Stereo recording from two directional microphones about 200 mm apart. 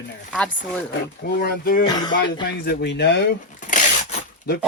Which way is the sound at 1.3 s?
50° left (ahead or behind).